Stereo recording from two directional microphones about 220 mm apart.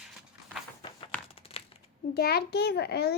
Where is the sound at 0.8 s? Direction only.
25° left (ahead or behind).